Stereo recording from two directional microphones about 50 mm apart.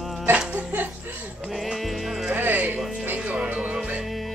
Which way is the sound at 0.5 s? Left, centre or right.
Right.